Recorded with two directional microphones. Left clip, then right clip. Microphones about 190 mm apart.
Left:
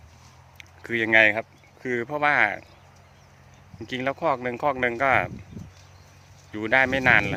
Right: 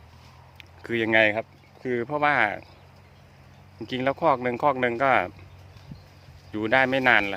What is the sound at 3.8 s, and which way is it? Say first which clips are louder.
Speech: right 2 dB; 5° right (ahead or behind).